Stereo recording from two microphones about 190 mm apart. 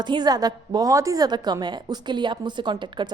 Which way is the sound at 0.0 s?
25° right (ahead or behind).